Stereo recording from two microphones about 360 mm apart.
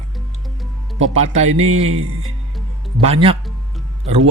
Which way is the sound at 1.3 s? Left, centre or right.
Centre.